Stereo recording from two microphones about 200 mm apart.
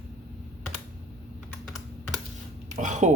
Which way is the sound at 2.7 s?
35° right (ahead or behind).